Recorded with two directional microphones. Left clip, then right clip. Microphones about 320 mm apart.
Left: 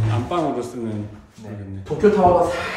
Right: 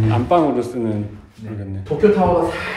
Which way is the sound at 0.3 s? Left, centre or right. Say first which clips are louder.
Right 8 dB; centre.